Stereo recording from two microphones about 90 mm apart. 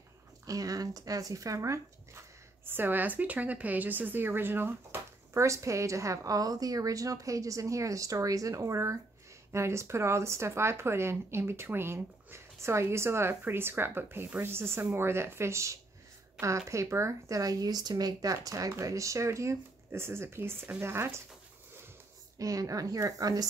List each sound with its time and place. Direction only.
0.5 s speech: 40° right (ahead or behind)
22.4 s speech: 40° right (ahead or behind)